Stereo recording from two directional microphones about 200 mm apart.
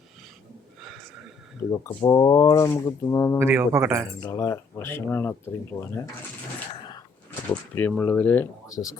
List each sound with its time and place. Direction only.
1.7 s speech: 20° left (ahead or behind)
3.3 s a man's voice: 10° right (ahead or behind)
4.2 s speech: 15° left (ahead or behind)
7.8 s speech: 10° left (ahead or behind)